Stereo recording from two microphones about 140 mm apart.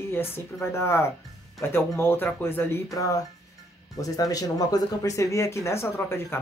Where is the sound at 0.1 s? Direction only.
15° left (ahead or behind).